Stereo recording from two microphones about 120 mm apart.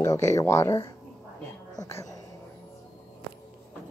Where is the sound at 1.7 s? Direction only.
25° left (ahead or behind).